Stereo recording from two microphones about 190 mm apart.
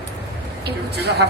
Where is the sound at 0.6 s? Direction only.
60° right (ahead or behind).